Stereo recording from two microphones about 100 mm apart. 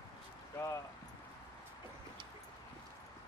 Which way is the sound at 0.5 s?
30° left (ahead or behind).